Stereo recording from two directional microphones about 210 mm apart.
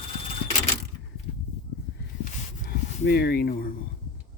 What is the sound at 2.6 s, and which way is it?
Speech, 45° left (ahead or behind).